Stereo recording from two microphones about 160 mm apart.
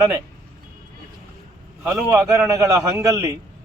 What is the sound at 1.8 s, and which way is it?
A man's voice, 15° right (ahead or behind).